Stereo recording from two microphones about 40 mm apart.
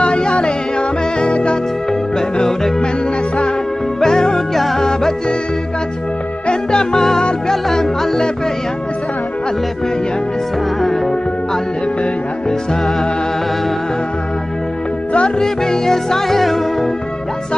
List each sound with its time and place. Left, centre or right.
0.0 s music: left
4.0 s music: centre
6.4 s music: left
15.1 s music: centre